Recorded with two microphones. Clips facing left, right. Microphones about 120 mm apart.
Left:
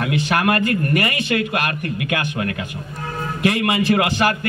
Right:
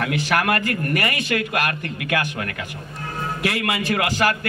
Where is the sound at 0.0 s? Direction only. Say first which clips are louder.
Left 2 dB; 25° left (ahead or behind).